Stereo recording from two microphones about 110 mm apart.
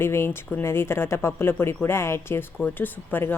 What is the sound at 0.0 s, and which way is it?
A woman's voice, 20° left (ahead or behind).